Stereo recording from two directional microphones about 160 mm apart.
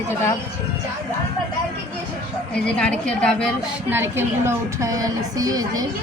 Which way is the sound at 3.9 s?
15° right (ahead or behind).